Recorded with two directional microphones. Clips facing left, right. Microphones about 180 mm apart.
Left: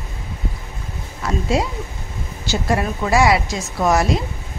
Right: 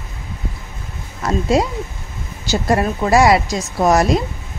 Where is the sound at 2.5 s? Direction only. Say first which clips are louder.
Right 3 dB; 40° right (ahead or behind).